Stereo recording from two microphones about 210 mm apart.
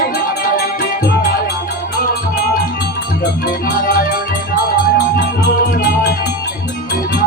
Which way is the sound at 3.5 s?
40° left (ahead or behind).